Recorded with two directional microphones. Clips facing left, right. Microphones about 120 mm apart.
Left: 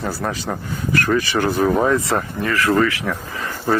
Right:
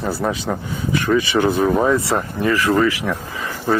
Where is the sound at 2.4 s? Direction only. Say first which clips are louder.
Right 3 dB; 15° right (ahead or behind).